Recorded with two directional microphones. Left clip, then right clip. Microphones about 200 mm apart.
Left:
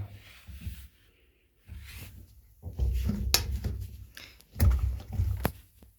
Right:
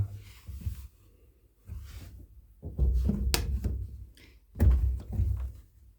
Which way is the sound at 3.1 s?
40° right (ahead or behind).